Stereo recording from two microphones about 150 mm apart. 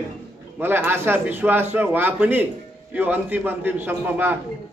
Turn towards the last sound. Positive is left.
turn(degrees=-15)  # may be behind; listen again after turning